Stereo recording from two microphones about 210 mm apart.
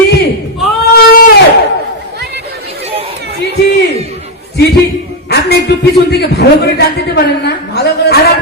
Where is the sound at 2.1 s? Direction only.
50° right (ahead or behind).